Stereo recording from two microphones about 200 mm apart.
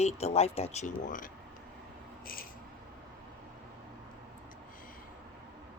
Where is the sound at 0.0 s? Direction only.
30° left (ahead or behind).